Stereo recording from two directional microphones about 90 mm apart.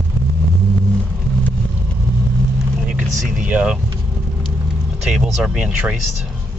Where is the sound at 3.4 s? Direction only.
15° right (ahead or behind).